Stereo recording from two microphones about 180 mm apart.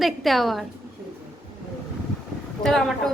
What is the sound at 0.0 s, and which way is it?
Speech, centre (ahead or behind).